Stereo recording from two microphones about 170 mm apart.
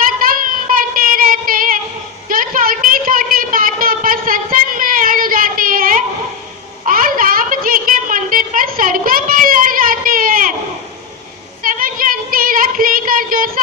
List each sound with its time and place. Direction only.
0.2 s child singing: 55° right (ahead or behind)
2.2 s a sound: 55° right (ahead or behind)
11.6 s child singing: 55° right (ahead or behind)